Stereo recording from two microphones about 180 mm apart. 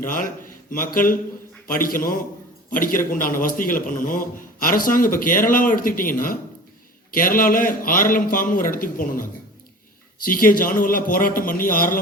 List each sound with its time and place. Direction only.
0.0 s a man's voice: 50° left (ahead or behind)